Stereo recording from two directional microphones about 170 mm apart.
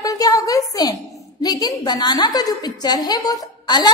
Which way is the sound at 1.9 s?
25° left (ahead or behind).